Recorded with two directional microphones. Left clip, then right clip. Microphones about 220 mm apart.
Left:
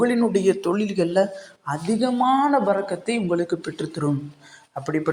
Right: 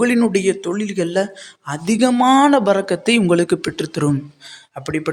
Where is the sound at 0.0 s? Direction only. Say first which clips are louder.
Right 3 dB; 30° right (ahead or behind).